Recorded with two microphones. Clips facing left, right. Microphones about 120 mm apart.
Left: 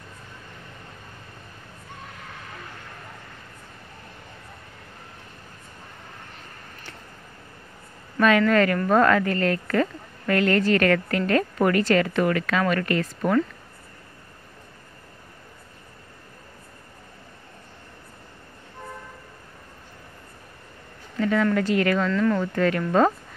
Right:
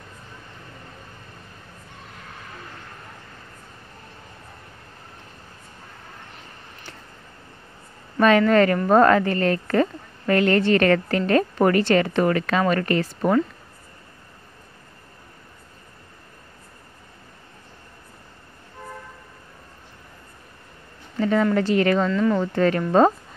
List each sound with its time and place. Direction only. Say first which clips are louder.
8.2 s a woman's voice: right 3 dB; 35° right (ahead or behind)
21.2 s a sound: right 2 dB; 30° right (ahead or behind)
21.5 s a woman's voice: right 3 dB; 30° right (ahead or behind)
22.1 s speech: right 1 dB; 15° right (ahead or behind)
22.4 s a woman's voice: right 2 dB; 30° right (ahead or behind)